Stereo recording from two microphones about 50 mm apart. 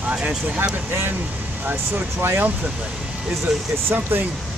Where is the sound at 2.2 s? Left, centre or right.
Right.